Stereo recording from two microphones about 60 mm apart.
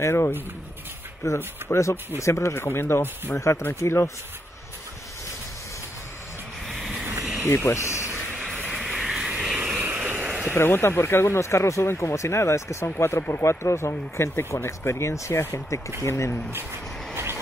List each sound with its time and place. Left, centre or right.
0.0 s speech: left
6.7 s vehicle: centre
7.4 s speech: left
8.6 s vehicle: centre
9.8 s vehicle: right
10.5 s speech: left
17.1 s vehicle: right